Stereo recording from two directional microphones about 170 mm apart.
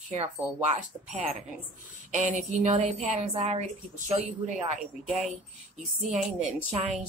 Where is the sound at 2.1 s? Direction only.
45° right (ahead or behind).